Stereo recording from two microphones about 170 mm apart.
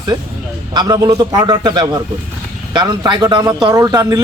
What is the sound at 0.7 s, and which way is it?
Speech, 25° right (ahead or behind).